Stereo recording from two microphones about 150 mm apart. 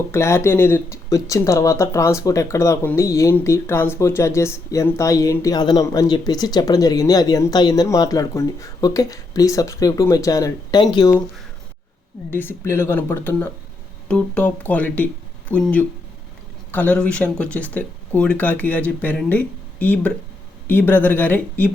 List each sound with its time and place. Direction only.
0.1 s speech: 20° left (ahead or behind)
12.3 s speech: 15° left (ahead or behind)